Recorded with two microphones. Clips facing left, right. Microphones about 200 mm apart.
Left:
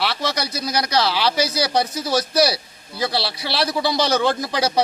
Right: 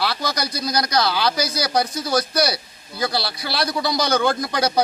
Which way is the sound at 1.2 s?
30° left (ahead or behind).